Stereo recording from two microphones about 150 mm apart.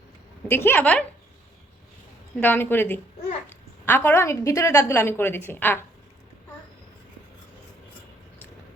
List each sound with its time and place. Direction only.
0.4 s a woman's voice: 15° left (ahead or behind)
2.4 s a woman's voice: 15° left (ahead or behind)